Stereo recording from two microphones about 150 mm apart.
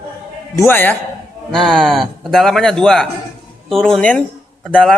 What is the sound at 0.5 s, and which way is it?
Speech, 15° left (ahead or behind).